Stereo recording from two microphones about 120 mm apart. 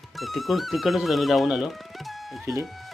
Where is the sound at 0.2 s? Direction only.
Centre (ahead or behind).